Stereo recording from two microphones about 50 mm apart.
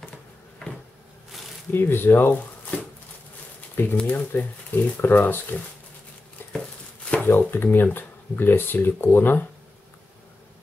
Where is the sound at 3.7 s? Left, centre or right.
Left.